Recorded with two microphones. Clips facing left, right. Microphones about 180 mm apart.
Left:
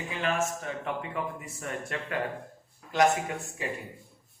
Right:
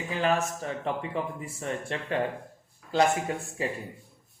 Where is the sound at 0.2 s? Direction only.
35° right (ahead or behind).